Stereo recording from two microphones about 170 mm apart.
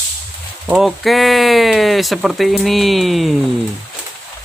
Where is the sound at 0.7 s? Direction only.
Centre (ahead or behind).